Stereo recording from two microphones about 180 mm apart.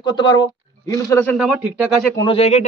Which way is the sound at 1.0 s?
10° left (ahead or behind).